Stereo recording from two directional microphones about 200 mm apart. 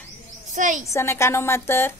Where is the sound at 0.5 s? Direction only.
40° right (ahead or behind).